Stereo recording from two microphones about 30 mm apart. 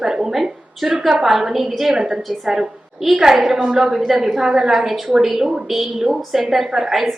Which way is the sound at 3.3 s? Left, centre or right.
Centre.